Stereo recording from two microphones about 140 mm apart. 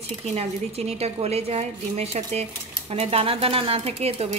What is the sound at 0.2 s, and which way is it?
Speech, 50° right (ahead or behind).